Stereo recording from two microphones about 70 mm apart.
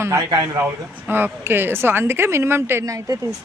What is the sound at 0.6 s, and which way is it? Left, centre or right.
A woman's voice, right.